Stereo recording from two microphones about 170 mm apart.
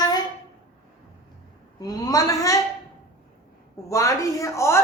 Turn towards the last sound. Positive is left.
turn(degrees=15)  # may be behind; listen again after turning